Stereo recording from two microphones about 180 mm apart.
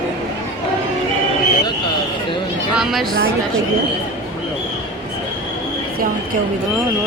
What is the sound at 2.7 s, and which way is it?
Speech, centre (ahead or behind).